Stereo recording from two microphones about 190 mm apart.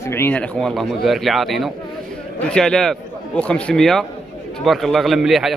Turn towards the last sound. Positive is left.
turn(degrees=0)  # may be behind; listen again after turning